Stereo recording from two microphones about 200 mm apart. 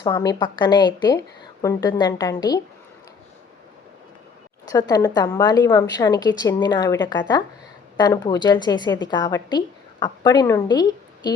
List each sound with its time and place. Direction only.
0.0 s a woman's voice: 20° left (ahead or behind)
4.7 s a woman's voice: 20° left (ahead or behind)